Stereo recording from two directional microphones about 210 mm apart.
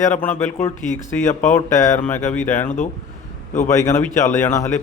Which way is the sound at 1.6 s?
10° left (ahead or behind).